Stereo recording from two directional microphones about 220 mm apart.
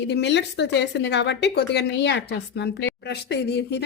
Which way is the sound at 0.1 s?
50° left (ahead or behind).